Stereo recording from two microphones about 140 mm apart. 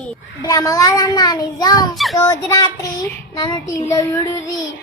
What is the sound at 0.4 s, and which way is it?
A child's voice, 25° left (ahead or behind).